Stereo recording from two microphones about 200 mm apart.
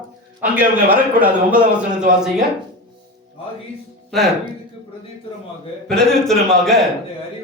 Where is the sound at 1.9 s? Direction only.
40° right (ahead or behind).